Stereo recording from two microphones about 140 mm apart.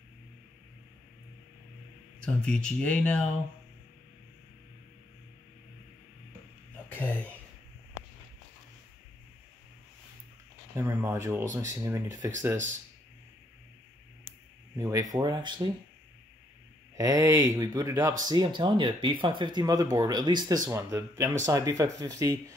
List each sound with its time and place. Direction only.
2.2 s speech: 5° left (ahead or behind)
10.8 s speech: 15° right (ahead or behind)
14.8 s speech: 20° right (ahead or behind)
16.9 s speech: 25° right (ahead or behind)